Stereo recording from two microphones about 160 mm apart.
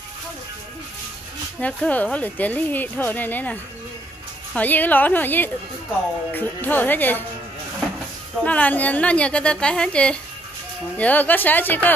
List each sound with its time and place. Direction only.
1.6 s speech: 10° left (ahead or behind)
4.6 s speech: 10° left (ahead or behind)
8.5 s speech: 10° left (ahead or behind)